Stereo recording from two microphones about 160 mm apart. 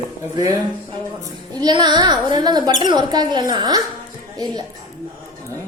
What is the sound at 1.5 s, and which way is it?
Speech, 25° right (ahead or behind).